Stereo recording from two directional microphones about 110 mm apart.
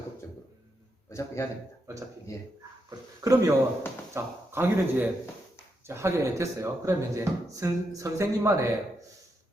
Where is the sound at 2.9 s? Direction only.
30° right (ahead or behind).